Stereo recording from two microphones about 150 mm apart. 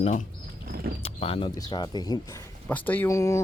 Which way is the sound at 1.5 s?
25° left (ahead or behind).